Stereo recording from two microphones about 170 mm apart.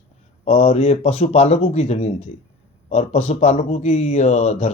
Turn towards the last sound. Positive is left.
turn(degrees=40)  # may be behind; listen again after turning